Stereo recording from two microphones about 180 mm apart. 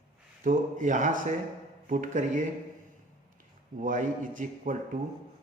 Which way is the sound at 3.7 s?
45° right (ahead or behind).